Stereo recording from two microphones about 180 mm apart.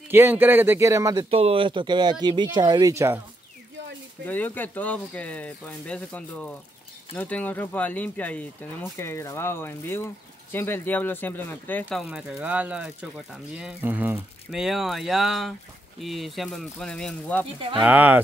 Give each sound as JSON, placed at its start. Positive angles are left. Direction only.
{"t": 0.1, "sound": "speech", "side_deg": -10}
{"t": 1.3, "sound": "speech", "side_deg": -30}
{"t": 4.3, "sound": "speech", "side_deg": 10}
{"t": 12.0, "sound": "speech", "side_deg": -5}
{"t": 17.6, "sound": "speech", "side_deg": -30}
{"t": 17.8, "sound": "speech", "side_deg": -10}